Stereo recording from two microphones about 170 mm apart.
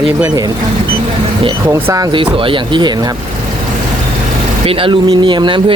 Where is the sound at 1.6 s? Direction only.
20° right (ahead or behind).